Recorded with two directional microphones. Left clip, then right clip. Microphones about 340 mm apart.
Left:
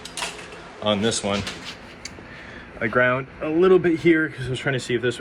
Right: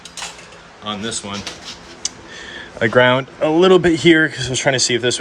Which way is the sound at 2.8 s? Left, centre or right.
Right.